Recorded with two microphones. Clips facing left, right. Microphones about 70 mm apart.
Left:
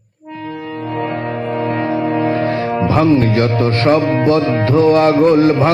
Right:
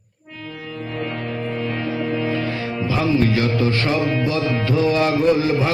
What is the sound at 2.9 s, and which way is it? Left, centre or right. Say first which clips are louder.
Music: left 5 dB; left.